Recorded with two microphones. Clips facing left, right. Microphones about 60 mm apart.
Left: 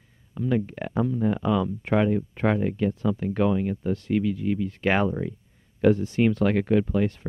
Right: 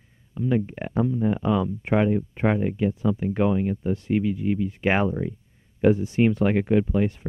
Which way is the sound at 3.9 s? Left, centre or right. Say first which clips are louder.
Even; centre.